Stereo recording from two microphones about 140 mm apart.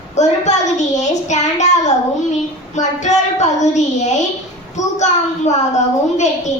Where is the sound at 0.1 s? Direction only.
55° left (ahead or behind).